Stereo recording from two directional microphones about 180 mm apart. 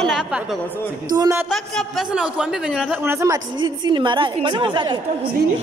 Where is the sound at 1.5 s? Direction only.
Centre (ahead or behind); by 5.0 s 25° right (ahead or behind).